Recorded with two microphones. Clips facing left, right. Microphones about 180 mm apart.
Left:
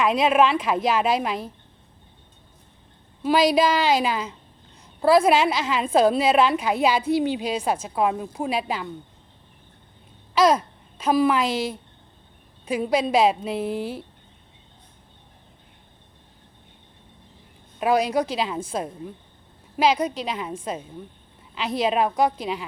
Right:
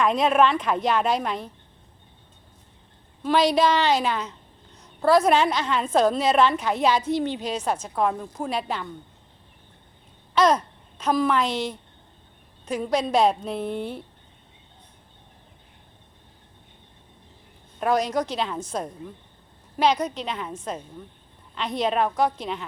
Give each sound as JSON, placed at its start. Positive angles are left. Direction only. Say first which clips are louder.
{"t": 0.0, "sound": "a woman's voice", "louder": "left 1 dB", "side_deg": 5}
{"t": 3.2, "sound": "a woman's voice", "louder": "left 1 dB", "side_deg": 10}
{"t": 10.3, "sound": "a woman's voice", "louder": "left 1 dB", "side_deg": 10}
{"t": 17.7, "sound": "a woman's voice", "louder": "left 2 dB", "side_deg": 10}